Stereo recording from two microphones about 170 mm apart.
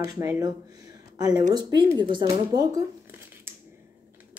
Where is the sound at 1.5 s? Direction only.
25° right (ahead or behind).